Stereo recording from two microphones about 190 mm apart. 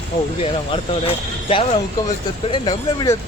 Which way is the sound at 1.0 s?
30° left (ahead or behind).